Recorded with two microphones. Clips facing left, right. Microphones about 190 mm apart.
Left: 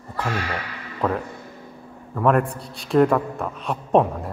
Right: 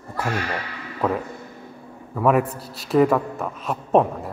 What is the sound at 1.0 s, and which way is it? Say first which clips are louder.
A man's voice: even; 10° right (ahead or behind).